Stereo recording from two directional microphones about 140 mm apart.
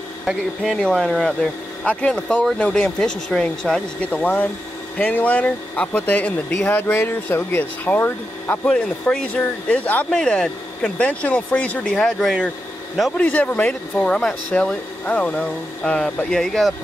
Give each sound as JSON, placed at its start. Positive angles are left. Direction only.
{"t": 0.2, "sound": "speech", "side_deg": 0}